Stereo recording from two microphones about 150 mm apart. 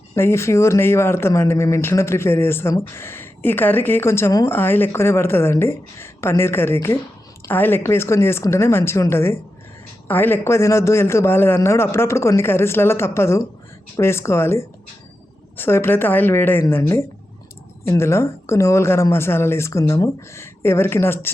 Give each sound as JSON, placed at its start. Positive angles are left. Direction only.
{"t": 0.2, "sound": "speech", "side_deg": 15}